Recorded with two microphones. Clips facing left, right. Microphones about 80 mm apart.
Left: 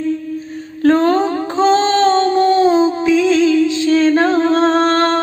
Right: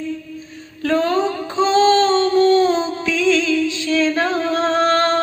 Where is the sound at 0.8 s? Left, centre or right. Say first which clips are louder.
Left 5 dB; left.